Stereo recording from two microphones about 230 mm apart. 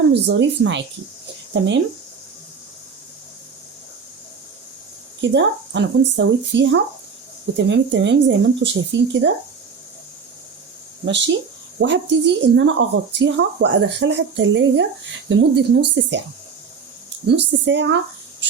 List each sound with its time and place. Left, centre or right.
0.1 s speech: right
5.2 s speech: right
11.0 s speech: right
17.2 s speech: right